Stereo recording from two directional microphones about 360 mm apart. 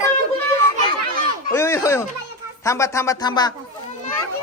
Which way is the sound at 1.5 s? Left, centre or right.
Centre.